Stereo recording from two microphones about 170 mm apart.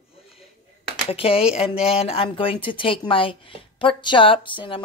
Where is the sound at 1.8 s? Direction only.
35° left (ahead or behind).